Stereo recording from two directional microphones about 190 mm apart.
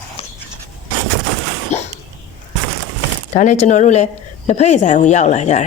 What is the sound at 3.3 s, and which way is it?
A woman's voice, 40° left (ahead or behind).